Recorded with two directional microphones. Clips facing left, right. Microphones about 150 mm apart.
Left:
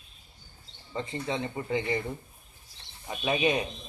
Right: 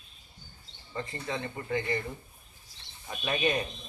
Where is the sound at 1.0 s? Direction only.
25° left (ahead or behind).